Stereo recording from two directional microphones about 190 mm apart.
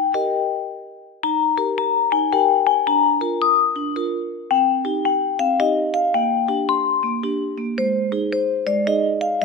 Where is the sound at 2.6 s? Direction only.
40° left (ahead or behind).